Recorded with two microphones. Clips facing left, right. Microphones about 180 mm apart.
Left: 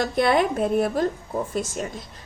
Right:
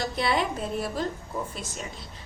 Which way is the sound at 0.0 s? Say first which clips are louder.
Left 6 dB; 55° left (ahead or behind).